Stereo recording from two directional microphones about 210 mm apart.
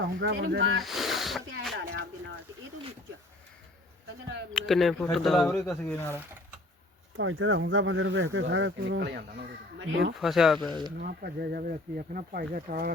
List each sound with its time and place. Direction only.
0.0 s speech: 60° right (ahead or behind)
0.8 s speech: centre (ahead or behind)
1.8 s speech: 50° right (ahead or behind)
4.5 s speech: centre (ahead or behind)
7.2 s speech: 70° right (ahead or behind)
10.2 s speech: centre (ahead or behind)
10.7 s speech: 20° right (ahead or behind)
10.9 s speech: 45° right (ahead or behind)